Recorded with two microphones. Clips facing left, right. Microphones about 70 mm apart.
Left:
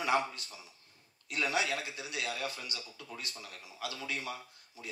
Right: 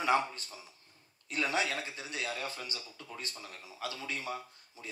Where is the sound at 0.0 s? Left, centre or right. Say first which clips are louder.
Right 1 dB; right.